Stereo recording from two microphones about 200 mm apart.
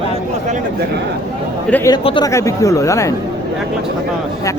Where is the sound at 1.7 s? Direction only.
10° left (ahead or behind).